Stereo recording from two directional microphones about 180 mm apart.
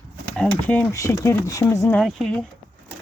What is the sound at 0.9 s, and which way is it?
Speech, 20° left (ahead or behind).